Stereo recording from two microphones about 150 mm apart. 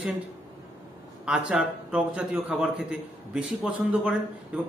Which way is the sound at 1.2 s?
5° right (ahead or behind).